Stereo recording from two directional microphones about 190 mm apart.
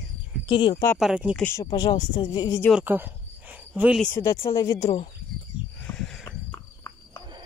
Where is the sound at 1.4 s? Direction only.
10° left (ahead or behind).